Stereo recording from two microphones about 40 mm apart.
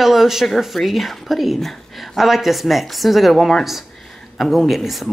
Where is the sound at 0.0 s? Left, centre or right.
Centre.